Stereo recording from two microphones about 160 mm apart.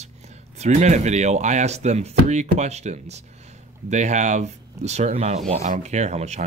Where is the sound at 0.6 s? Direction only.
45° right (ahead or behind).